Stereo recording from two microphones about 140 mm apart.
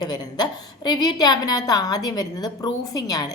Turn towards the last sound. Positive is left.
turn(degrees=25)  # may be behind; listen again after turning